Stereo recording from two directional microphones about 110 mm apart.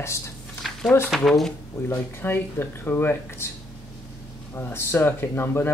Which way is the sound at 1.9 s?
20° left (ahead or behind).